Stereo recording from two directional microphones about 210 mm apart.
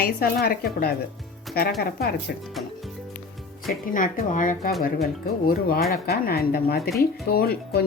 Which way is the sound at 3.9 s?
40° left (ahead or behind).